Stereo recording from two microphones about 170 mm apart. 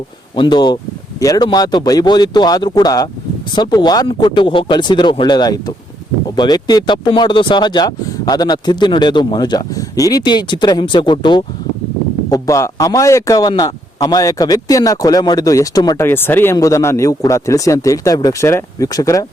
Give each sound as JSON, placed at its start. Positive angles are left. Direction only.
{"t": 0.3, "sound": "a man's voice", "side_deg": 25}